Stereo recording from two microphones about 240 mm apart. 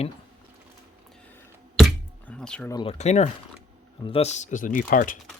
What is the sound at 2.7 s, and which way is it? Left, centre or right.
Speech, left.